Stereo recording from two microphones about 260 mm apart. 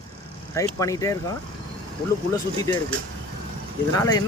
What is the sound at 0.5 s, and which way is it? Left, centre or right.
Speech, centre.